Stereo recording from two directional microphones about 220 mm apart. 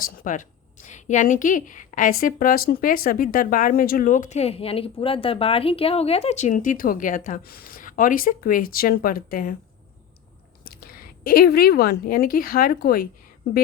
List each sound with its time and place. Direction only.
0.0 s a woman's voice: 40° left (ahead or behind)
10.6 s speech: 40° left (ahead or behind)